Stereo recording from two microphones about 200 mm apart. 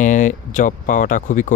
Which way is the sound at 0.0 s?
40° left (ahead or behind).